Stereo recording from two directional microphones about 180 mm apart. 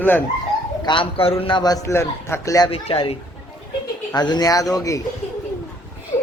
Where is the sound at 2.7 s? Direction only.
30° left (ahead or behind).